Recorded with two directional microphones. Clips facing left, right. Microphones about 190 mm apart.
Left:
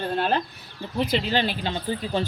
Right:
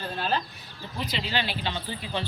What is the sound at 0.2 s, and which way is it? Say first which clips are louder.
Speech: left 5 dB; 55° left (ahead or behind).